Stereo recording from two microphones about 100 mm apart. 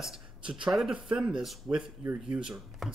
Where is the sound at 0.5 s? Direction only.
5° right (ahead or behind).